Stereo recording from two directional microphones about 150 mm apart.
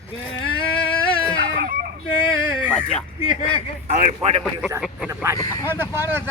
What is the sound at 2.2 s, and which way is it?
Speech, 35° left (ahead or behind).